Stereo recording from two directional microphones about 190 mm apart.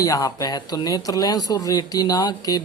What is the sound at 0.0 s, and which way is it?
Speech, 20° left (ahead or behind).